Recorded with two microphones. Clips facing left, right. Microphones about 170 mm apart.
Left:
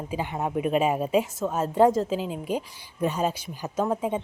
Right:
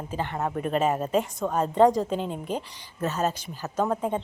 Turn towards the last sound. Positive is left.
turn(degrees=5)  # may be behind; listen again after turning